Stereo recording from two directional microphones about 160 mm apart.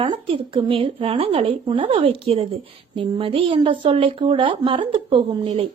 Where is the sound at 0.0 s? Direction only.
30° right (ahead or behind).